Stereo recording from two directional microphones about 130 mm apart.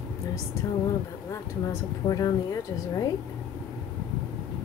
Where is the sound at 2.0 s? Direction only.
30° left (ahead or behind).